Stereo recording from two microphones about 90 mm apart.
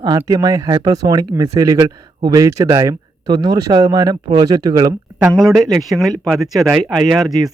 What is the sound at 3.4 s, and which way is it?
Speech, 50° right (ahead or behind).